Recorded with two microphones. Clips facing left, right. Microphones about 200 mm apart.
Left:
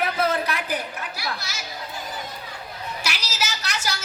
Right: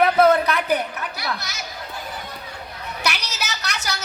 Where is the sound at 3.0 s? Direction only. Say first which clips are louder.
Right 4 dB; 60° right (ahead or behind).